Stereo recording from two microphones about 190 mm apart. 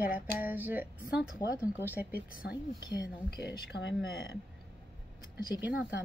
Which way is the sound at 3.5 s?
65° left (ahead or behind).